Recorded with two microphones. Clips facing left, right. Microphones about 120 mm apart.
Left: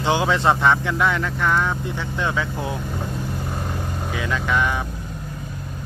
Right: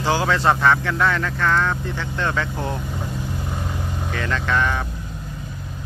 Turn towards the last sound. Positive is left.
turn(degrees=10)  # may be behind; listen again after turning